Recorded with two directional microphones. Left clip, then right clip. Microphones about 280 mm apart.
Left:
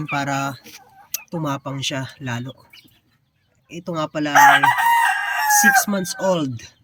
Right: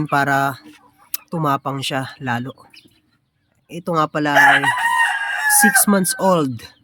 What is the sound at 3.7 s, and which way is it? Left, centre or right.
Speech, centre.